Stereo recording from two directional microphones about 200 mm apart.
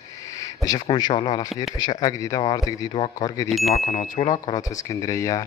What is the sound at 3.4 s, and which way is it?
Speech, centre (ahead or behind).